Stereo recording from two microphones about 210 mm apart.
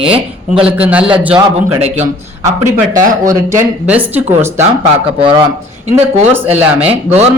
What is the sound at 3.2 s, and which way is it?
Speech, 10° right (ahead or behind).